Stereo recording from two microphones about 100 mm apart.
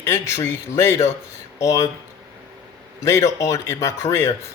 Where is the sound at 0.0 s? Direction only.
30° left (ahead or behind).